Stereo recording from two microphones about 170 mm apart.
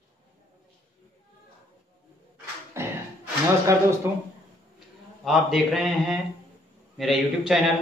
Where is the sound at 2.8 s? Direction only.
15° right (ahead or behind).